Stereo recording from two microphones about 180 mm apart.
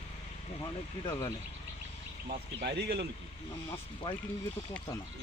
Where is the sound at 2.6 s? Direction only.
65° right (ahead or behind).